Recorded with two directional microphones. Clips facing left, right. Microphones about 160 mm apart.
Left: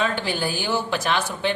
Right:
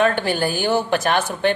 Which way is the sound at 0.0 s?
55° right (ahead or behind).